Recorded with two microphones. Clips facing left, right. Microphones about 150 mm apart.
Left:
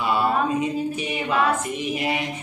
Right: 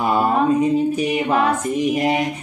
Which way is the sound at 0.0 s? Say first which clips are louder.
Right 4 dB; 45° right (ahead or behind).